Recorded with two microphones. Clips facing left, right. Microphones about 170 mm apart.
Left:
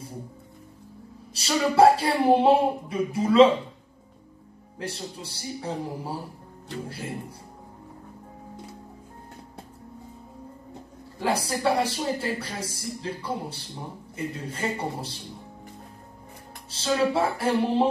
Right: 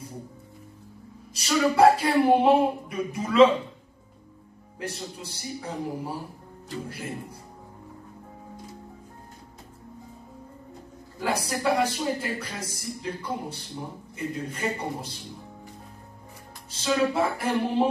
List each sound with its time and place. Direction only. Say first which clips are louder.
1.3 s speech: even; 30° left (ahead or behind)
4.7 s speech: even; 30° left (ahead or behind)
11.1 s speech: left 2 dB; 30° left (ahead or behind)
16.7 s speech: left 1 dB; 30° left (ahead or behind)